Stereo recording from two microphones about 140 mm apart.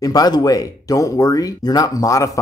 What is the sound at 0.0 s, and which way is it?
Speech, 30° left (ahead or behind).